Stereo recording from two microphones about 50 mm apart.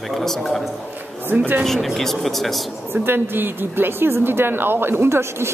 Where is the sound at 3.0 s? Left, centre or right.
Right.